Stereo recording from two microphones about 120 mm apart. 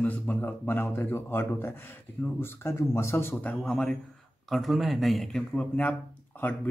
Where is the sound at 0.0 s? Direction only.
15° left (ahead or behind).